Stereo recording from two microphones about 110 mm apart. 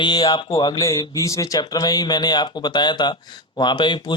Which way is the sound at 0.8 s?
30° left (ahead or behind).